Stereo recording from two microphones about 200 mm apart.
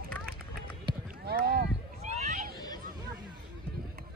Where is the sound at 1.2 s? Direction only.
50° right (ahead or behind).